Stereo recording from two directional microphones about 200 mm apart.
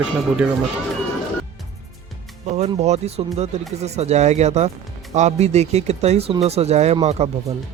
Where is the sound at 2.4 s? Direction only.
35° right (ahead or behind).